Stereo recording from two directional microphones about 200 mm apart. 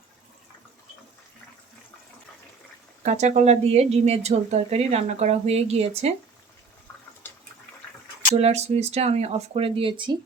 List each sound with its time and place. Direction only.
3.0 s speech: 35° right (ahead or behind)
8.4 s speech: 30° right (ahead or behind)